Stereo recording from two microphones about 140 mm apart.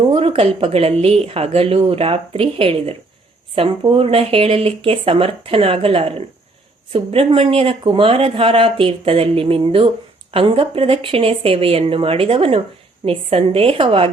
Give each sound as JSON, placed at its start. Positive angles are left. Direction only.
{"t": 0.1, "sound": "speech", "side_deg": -45}